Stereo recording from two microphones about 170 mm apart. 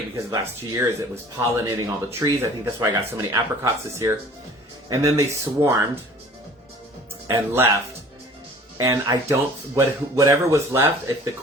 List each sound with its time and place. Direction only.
0.3 s speech: 20° right (ahead or behind)
7.3 s speech: 15° right (ahead or behind)
8.8 s speech: 20° right (ahead or behind)